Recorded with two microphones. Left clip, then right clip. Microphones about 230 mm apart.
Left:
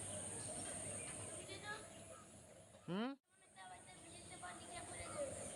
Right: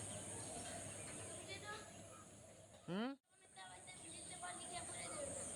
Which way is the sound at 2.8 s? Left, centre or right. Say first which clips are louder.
Even; centre.